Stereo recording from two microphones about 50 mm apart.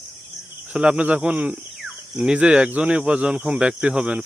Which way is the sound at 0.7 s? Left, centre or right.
Right.